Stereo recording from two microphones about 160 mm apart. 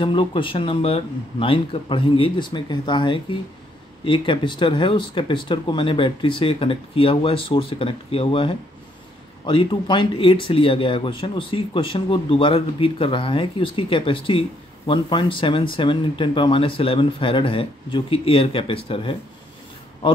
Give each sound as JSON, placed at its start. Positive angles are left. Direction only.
{"t": 0.0, "sound": "speech", "side_deg": 30}